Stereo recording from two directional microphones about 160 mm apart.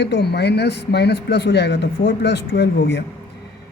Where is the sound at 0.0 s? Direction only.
90° left.